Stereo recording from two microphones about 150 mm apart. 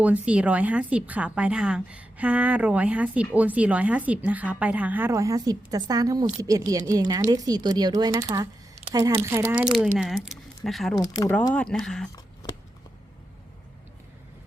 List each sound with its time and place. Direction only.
0.0 s a woman's voice: 10° right (ahead or behind)
9.7 s speech: centre (ahead or behind)
10.9 s speech: 25° left (ahead or behind)
11.5 s speech: 5° left (ahead or behind)
12.1 s a sound: 25° left (ahead or behind)